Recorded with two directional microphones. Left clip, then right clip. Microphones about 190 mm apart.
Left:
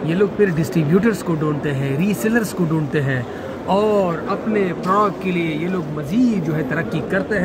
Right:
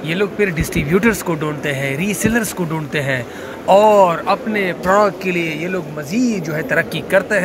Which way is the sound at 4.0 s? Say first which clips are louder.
Right 7 dB; 30° right (ahead or behind).